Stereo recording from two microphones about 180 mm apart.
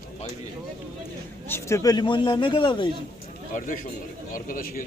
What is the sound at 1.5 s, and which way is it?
A man's voice, 15° left (ahead or behind).